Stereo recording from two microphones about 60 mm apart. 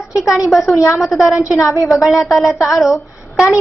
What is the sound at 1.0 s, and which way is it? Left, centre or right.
Speech, centre.